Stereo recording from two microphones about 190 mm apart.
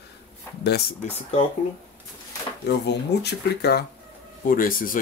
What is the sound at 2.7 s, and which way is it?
Speech, 60° left (ahead or behind).